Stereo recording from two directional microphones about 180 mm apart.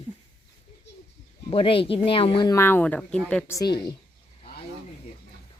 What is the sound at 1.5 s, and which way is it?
Speech, 30° left (ahead or behind).